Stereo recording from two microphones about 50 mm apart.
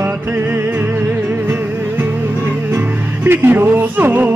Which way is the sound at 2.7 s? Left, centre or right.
Right.